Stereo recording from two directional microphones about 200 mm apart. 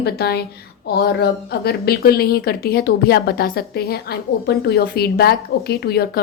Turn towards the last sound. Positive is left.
turn(degrees=50)  # may be behind; listen again after turning